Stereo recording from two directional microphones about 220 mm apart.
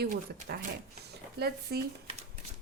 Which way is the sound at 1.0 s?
45° right (ahead or behind).